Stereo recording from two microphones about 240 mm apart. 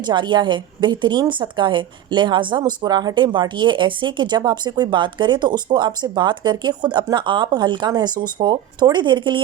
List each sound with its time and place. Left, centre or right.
0.0 s a woman's voice: centre